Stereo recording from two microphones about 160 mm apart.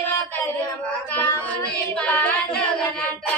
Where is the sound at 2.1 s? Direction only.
10° left (ahead or behind).